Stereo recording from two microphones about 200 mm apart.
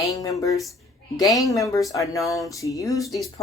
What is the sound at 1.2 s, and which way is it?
Speech, 15° left (ahead or behind).